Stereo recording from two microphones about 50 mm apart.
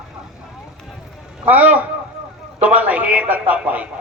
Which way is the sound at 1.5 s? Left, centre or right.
Right.